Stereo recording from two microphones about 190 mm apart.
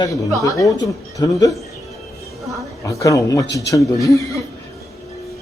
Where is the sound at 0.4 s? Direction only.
15° left (ahead or behind).